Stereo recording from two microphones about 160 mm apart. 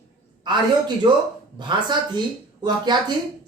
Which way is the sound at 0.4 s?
30° right (ahead or behind).